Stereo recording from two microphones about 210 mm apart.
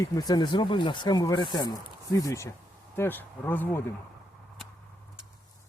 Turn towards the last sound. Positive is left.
turn(degrees=10)  # may be behind; listen again after turning